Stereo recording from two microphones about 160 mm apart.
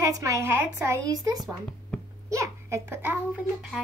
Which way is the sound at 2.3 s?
20° right (ahead or behind).